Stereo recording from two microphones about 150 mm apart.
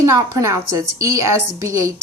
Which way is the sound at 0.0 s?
20° right (ahead or behind).